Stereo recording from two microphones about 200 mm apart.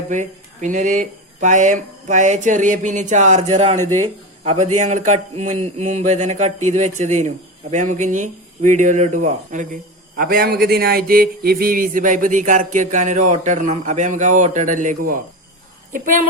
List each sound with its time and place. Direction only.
0.1 s speech: 40° right (ahead or behind)
3.8 s speech: 90° right
4.4 s speech: 35° right (ahead or behind)